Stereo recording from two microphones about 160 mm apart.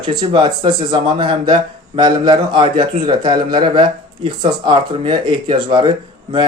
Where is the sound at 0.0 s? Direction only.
30° right (ahead or behind).